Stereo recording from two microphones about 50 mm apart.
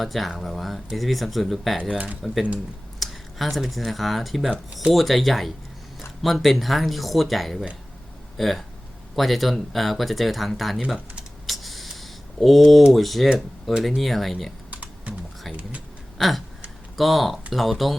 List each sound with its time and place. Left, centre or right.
0.0 s speech: centre
1.9 s speech: right
3.0 s speech: centre
11.4 s a sound: centre
12.9 s speech: centre
14.7 s typing: right
16.1 s a sound: centre
17.0 s speech: centre